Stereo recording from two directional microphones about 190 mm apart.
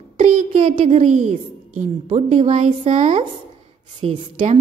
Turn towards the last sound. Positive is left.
turn(degrees=-30)  # may be behind; listen again after turning